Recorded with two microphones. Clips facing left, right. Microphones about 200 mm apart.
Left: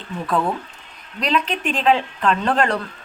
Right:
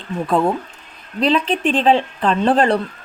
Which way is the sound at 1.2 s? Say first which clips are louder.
Right 5 dB; 30° right (ahead or behind).